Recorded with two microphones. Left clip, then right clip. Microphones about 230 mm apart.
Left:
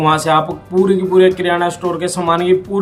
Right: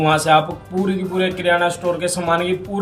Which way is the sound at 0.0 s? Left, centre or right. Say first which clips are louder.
Left 2 dB; centre.